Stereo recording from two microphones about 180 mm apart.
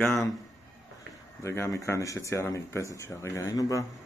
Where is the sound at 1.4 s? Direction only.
15° left (ahead or behind).